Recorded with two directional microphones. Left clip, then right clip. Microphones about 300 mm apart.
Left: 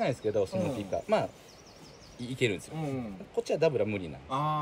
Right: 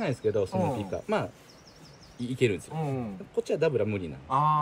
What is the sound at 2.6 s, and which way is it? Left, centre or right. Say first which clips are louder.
Speech: right 3 dB; centre.